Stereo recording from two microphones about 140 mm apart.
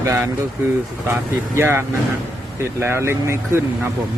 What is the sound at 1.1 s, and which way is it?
Speech, 20° right (ahead or behind).